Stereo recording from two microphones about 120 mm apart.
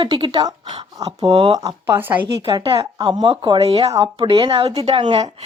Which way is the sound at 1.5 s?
30° right (ahead or behind).